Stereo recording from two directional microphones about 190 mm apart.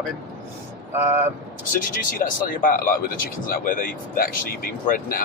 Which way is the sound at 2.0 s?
45° left (ahead or behind).